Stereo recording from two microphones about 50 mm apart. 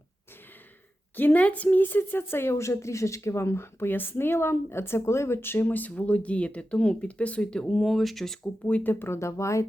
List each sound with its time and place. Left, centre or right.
1.1 s a woman's voice: left
7.7 s speech: centre
8.6 s speech: left
9.0 s speech: left